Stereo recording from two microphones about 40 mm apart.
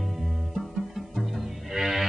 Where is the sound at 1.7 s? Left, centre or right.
Centre.